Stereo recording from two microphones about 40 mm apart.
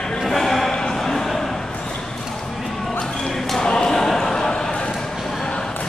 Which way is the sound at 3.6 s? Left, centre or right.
Centre.